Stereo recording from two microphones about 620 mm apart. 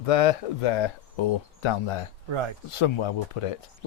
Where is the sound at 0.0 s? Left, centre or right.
Left.